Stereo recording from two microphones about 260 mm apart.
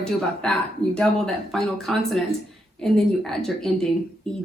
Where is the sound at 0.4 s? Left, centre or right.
Centre.